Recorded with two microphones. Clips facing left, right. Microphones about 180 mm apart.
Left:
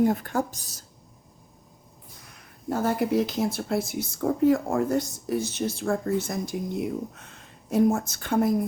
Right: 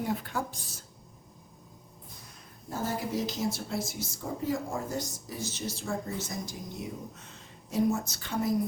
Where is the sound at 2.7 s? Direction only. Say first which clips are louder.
Left 8 dB; 65° left (ahead or behind).